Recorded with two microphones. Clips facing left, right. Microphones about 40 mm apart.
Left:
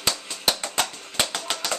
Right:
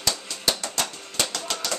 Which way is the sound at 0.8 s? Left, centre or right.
Left.